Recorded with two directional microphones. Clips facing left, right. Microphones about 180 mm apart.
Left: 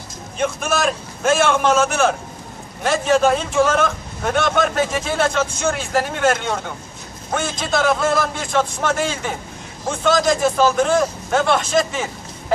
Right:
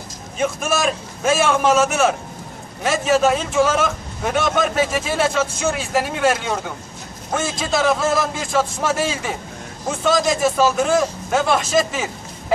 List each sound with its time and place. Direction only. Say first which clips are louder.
0.4 s a man's voice: even; 5° right (ahead or behind)